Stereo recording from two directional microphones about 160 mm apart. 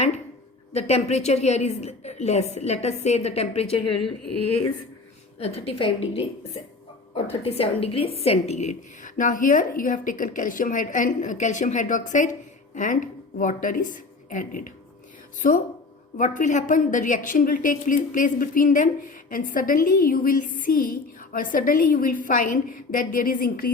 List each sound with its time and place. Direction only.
0.7 s a woman's voice: 40° left (ahead or behind)
5.4 s a woman's voice: 40° left (ahead or behind)
7.3 s a woman's voice: 40° left (ahead or behind); by 23.7 s 65° left (ahead or behind)